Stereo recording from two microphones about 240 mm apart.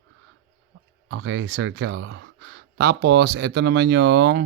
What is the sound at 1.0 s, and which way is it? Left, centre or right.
Speech, right.